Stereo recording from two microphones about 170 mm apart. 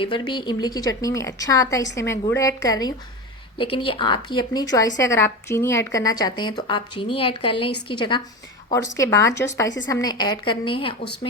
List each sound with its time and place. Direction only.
0.0 s a woman's voice: 30° left (ahead or behind)